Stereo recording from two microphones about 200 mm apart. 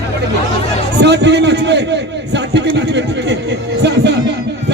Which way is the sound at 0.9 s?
60° right (ahead or behind).